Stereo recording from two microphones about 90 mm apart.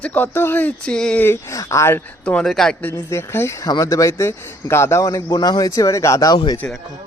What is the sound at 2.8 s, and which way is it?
Speech, 25° left (ahead or behind).